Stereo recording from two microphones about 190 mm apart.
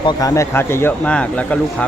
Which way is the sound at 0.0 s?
20° left (ahead or behind).